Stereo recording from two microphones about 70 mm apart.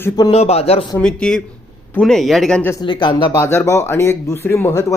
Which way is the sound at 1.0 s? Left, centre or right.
Centre.